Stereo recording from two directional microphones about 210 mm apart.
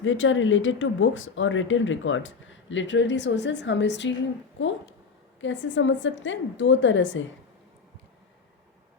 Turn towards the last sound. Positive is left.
turn(degrees=60)  # may be behind; listen again after turning